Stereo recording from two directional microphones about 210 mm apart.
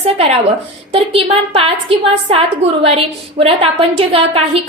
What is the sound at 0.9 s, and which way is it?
A woman's voice, 25° right (ahead or behind).